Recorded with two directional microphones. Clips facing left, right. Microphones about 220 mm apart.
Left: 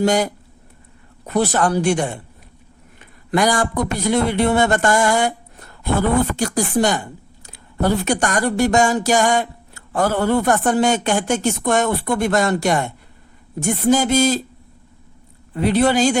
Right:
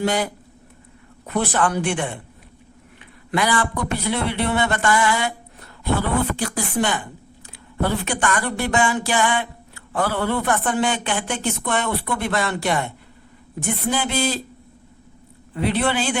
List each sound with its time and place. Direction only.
0.0 s speech: 45° left (ahead or behind)
1.3 s speech: 40° left (ahead or behind)
15.5 s speech: 40° left (ahead or behind)